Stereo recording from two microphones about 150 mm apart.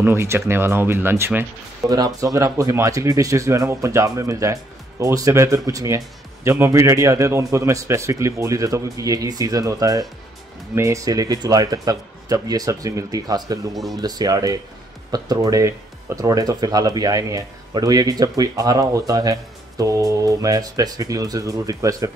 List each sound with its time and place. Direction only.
0.0 s speech: 15° right (ahead or behind)